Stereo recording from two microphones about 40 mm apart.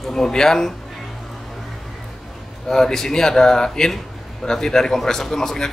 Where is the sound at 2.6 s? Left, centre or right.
Centre.